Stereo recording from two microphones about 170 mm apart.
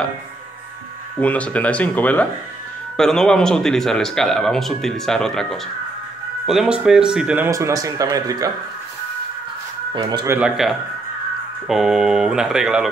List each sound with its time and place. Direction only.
1.2 s speech: 10° left (ahead or behind); by 8.5 s 20° right (ahead or behind)
9.9 s speech: 25° right (ahead or behind)
11.6 s speech: 5° right (ahead or behind)